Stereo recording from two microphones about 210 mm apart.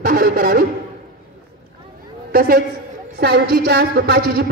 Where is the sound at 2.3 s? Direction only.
45° right (ahead or behind).